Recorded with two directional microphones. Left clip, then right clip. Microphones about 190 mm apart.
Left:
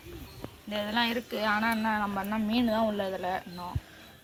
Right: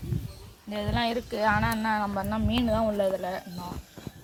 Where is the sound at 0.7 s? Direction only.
30° right (ahead or behind).